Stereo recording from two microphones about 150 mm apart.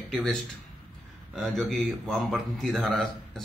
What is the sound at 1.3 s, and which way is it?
A man's voice, centre (ahead or behind).